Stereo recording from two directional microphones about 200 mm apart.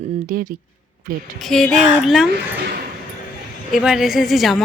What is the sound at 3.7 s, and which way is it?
Speech, centre (ahead or behind).